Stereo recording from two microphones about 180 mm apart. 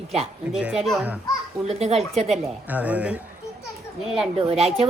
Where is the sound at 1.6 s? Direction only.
35° right (ahead or behind).